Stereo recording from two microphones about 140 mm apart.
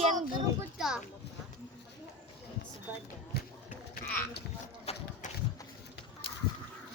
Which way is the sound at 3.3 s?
90° left.